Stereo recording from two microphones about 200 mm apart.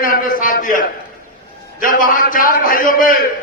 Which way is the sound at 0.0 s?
45° left (ahead or behind).